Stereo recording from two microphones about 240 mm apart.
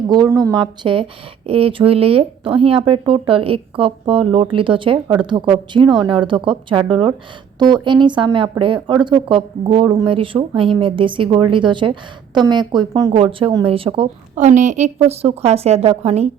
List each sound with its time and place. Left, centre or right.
0.1 s speech: centre